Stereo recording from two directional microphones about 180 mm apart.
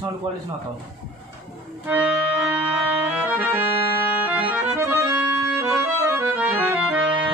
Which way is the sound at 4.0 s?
10° right (ahead or behind).